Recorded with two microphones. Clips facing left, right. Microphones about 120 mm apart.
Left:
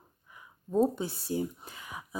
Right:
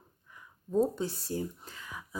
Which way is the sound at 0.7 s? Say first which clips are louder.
Left 1 dB; 10° left (ahead or behind).